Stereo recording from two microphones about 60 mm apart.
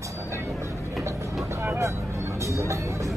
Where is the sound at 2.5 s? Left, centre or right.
Right.